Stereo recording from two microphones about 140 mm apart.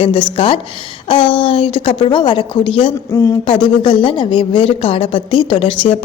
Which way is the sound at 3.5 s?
35° left (ahead or behind).